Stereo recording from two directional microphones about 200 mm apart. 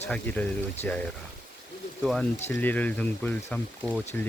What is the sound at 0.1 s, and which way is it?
Speech, 10° left (ahead or behind).